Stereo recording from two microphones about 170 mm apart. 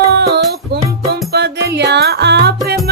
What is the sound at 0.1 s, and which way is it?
Music, 75° right (ahead or behind).